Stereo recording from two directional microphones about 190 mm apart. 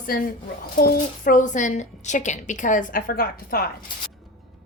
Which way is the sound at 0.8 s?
45° left (ahead or behind).